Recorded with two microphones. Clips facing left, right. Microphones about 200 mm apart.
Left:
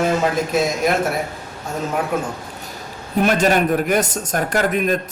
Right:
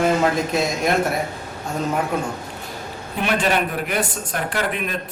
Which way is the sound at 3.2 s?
45° left (ahead or behind).